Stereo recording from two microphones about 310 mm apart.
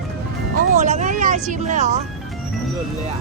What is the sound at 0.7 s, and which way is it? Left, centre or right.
Speech, right.